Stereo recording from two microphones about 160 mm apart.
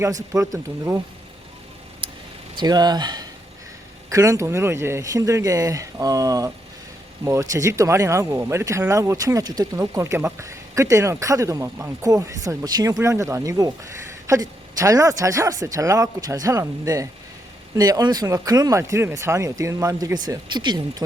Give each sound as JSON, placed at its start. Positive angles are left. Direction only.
{"t": 0.3, "sound": "speech", "side_deg": -20}
{"t": 2.0, "sound": "vehicle", "side_deg": -35}
{"t": 2.6, "sound": "speech", "side_deg": -25}